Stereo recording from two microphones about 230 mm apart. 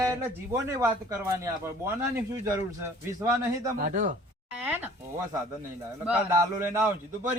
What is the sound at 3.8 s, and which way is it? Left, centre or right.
Speech, right.